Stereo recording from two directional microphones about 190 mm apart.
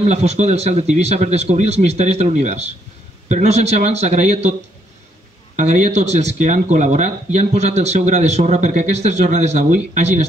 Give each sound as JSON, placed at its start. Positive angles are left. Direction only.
{"t": 0.0, "sound": "speech", "side_deg": -35}
{"t": 5.6, "sound": "speech", "side_deg": -40}